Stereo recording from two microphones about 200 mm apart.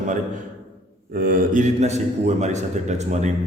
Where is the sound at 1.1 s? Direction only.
45° right (ahead or behind).